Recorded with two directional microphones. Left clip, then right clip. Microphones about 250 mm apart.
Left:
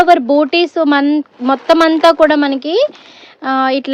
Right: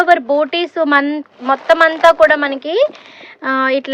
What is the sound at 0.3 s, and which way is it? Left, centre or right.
Speech, centre.